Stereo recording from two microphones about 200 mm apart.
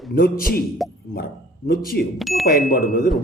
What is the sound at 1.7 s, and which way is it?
Speech, 50° left (ahead or behind).